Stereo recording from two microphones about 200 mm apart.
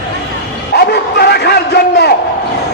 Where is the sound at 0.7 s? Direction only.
55° left (ahead or behind).